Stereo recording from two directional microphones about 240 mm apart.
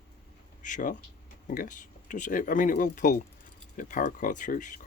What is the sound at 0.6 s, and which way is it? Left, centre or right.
Speech, left.